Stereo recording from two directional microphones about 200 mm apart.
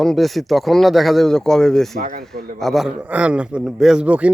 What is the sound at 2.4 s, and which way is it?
Speech, 50° right (ahead or behind).